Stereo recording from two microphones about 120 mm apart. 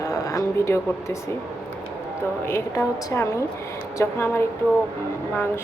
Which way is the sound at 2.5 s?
25° left (ahead or behind).